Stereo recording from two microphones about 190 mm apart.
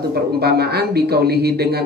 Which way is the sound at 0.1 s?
55° right (ahead or behind).